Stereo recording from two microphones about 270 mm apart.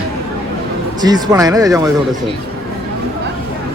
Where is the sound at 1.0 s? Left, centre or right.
Centre.